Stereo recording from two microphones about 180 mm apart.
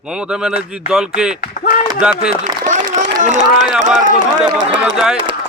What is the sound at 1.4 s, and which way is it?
Speech, 50° left (ahead or behind).